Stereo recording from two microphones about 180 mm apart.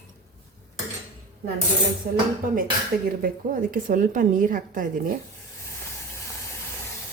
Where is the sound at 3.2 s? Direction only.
50° right (ahead or behind).